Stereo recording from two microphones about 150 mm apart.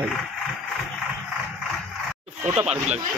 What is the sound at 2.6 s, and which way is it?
Speech, 45° right (ahead or behind).